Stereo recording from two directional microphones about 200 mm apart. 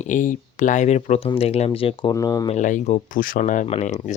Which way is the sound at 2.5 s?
40° left (ahead or behind).